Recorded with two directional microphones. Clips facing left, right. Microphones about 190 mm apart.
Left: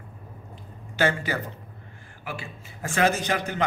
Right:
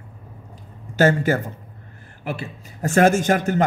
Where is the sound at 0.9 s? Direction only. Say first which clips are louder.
Right 7 dB; 45° right (ahead or behind).